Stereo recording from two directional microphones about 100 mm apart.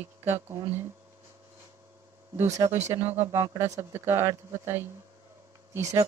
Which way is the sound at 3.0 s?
25° right (ahead or behind).